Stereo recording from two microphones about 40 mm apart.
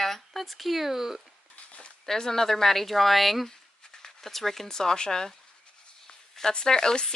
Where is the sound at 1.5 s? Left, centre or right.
Left.